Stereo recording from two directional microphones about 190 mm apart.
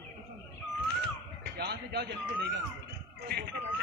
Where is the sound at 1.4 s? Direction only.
55° right (ahead or behind).